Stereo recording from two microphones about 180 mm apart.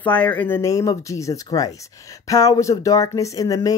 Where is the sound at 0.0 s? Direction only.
10° left (ahead or behind).